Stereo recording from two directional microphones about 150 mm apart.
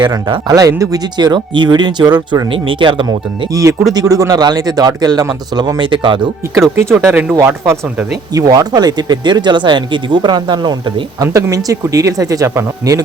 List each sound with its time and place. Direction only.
0.0 s speech: 30° right (ahead or behind)
7.0 s speech: 15° right (ahead or behind)